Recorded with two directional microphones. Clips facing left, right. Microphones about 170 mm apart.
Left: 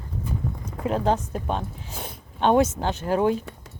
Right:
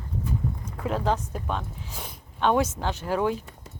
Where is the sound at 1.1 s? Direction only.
25° left (ahead or behind).